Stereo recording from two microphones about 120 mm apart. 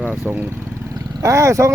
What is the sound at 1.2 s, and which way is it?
Speech, 25° right (ahead or behind).